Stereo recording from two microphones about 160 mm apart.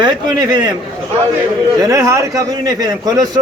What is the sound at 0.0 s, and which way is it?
Speech, 25° right (ahead or behind).